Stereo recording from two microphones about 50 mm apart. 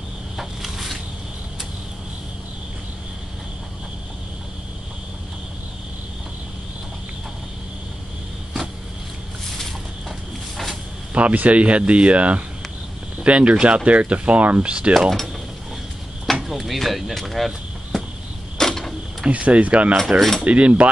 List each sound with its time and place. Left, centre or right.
0.4 s a sound: centre
11.1 s speech: right
15.0 s speech: centre
16.3 s speech: centre
17.9 s cricket: centre
18.6 s mechanisms: centre
19.2 s speech: right
20.2 s speech: centre
20.4 s speech: right